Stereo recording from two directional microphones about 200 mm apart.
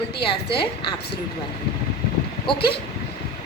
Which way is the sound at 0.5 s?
25° left (ahead or behind).